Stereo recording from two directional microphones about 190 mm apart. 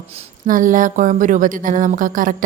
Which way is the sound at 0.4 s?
45° right (ahead or behind).